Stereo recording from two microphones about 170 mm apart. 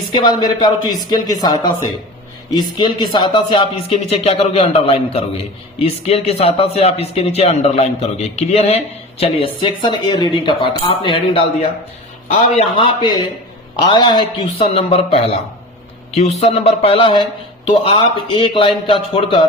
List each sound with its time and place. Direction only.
0.1 s speech: 25° left (ahead or behind)
2.7 s speech: 30° left (ahead or behind)